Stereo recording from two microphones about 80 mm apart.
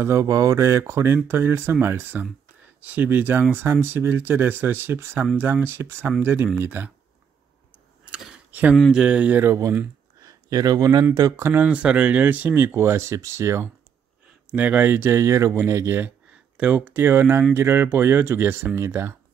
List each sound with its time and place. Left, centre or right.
0.0 s speech: right
8.5 s speech: centre
10.2 s speech: right
11.3 s speech: right
11.7 s speech: centre
12.7 s speech: right
14.5 s speech: right
16.5 s speech: centre
16.9 s speech: right